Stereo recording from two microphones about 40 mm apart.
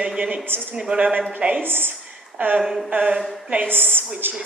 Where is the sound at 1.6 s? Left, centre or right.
Right.